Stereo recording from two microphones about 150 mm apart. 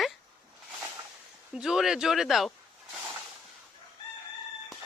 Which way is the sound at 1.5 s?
5° right (ahead or behind).